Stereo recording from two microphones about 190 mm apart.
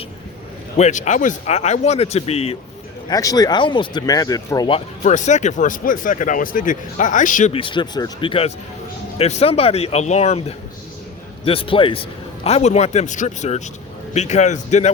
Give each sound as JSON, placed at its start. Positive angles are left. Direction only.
{"t": 0.8, "sound": "speech", "side_deg": 40}
{"t": 3.1, "sound": "speech", "side_deg": 20}
{"t": 5.0, "sound": "speech", "side_deg": 40}
{"t": 7.5, "sound": "speech", "side_deg": 25}
{"t": 11.4, "sound": "speech", "side_deg": 30}